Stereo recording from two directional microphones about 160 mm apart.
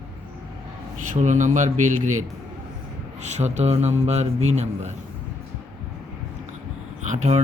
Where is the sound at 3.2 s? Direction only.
45° right (ahead or behind).